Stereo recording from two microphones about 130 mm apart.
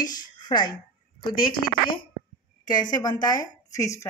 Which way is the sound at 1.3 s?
90° left.